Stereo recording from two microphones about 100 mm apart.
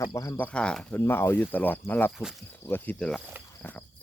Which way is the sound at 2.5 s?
20° left (ahead or behind).